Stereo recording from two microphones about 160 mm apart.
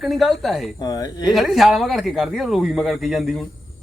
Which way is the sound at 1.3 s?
Centre (ahead or behind).